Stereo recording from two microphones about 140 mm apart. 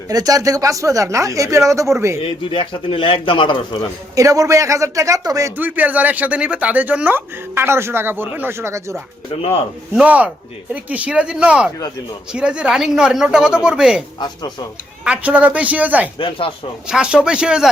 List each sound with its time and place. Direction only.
0.1 s speech: 25° right (ahead or behind)
2.4 s a man's voice: 35° left (ahead or behind)
4.1 s speech: 25° right (ahead or behind)
5.5 s speech: 10° right (ahead or behind)
9.3 s speech: 45° left (ahead or behind)
9.9 s speech: 10° right (ahead or behind)
15.0 s speech: 10° right (ahead or behind)
16.1 s a man's voice: 40° left (ahead or behind)
16.8 s speech: 5° right (ahead or behind)